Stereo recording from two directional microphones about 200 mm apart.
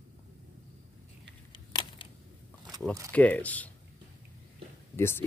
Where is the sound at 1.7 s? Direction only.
20° left (ahead or behind).